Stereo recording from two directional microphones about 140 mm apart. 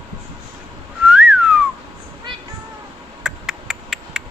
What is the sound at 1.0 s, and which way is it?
Whistling, 10° right (ahead or behind).